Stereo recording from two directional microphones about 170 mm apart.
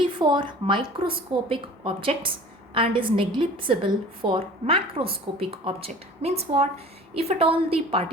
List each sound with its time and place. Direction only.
0.0 s a woman's voice: 30° right (ahead or behind)